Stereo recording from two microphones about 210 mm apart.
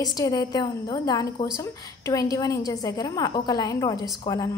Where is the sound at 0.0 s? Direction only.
20° left (ahead or behind).